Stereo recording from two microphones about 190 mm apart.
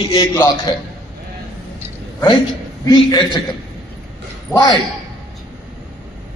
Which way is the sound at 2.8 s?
20° left (ahead or behind).